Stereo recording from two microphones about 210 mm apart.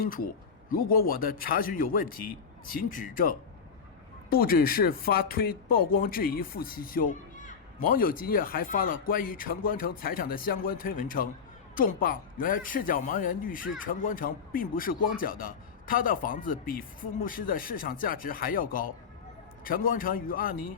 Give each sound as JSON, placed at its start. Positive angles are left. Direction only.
{"t": 0.7, "sound": "a man's voice", "side_deg": 45}